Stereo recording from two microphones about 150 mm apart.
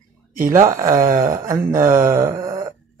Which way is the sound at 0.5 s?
20° right (ahead or behind).